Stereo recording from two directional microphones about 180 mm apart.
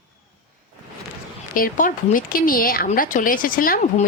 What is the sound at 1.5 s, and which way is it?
Speech, 50° left (ahead or behind).